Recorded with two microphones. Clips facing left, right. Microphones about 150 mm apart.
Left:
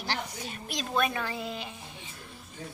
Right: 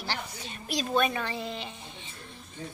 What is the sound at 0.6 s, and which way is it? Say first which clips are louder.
A woman's voice: right 3 dB; centre (ahead or behind).